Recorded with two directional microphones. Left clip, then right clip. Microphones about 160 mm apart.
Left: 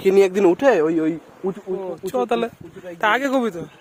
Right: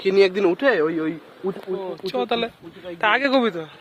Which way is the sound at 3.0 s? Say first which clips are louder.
Even; 40° left (ahead or behind).